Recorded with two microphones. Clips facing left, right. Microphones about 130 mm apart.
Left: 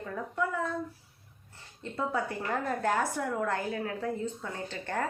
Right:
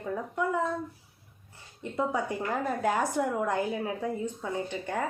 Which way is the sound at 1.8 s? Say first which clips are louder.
Right 2 dB; 15° right (ahead or behind).